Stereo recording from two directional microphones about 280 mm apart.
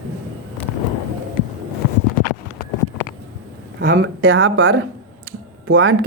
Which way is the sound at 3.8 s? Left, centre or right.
Right.